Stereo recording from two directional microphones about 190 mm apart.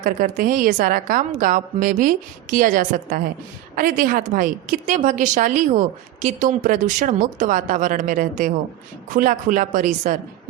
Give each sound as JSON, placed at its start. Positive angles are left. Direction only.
{"t": 0.0, "sound": "a woman's voice", "side_deg": -45}